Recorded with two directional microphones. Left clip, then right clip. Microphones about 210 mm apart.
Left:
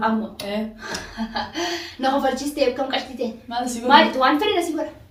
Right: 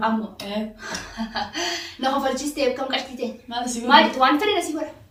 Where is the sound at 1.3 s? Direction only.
20° right (ahead or behind).